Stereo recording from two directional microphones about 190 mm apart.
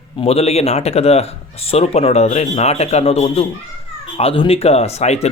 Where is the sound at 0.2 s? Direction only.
30° left (ahead or behind).